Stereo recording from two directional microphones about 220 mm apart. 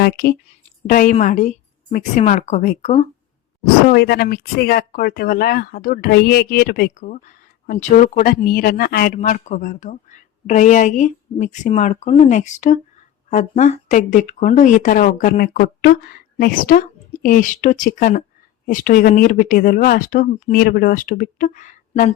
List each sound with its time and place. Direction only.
0.0 s speech: 45° left (ahead or behind)
3.8 s speech: 45° left (ahead or behind)